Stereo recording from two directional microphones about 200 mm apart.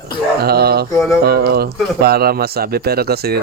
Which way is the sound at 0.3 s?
50° right (ahead or behind).